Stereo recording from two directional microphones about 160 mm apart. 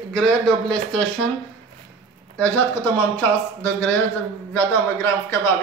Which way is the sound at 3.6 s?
10° left (ahead or behind).